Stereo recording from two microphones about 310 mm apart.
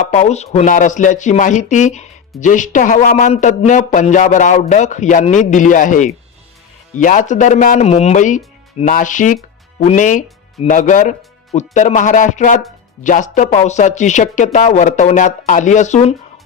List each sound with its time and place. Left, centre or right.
0.1 s speech: left